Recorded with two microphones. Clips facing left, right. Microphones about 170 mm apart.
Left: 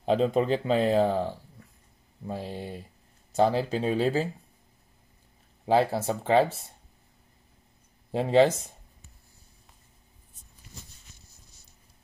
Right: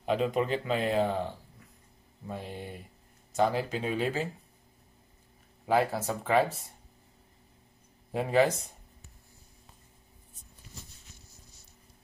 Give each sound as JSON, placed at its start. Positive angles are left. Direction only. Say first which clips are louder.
{"t": 0.0, "sound": "speech", "louder": "left 4 dB", "side_deg": 30}
{"t": 5.7, "sound": "speech", "louder": "left 3 dB", "side_deg": 30}
{"t": 8.1, "sound": "speech", "louder": "left 4 dB", "side_deg": 25}